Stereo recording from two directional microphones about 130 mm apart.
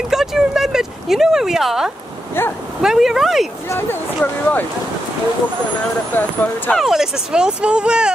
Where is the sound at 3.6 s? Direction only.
15° left (ahead or behind).